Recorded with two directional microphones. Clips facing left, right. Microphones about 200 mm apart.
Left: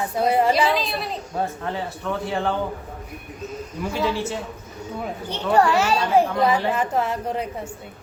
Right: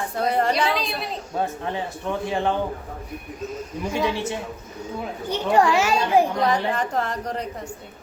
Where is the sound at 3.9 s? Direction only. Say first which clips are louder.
Even; 15° right (ahead or behind).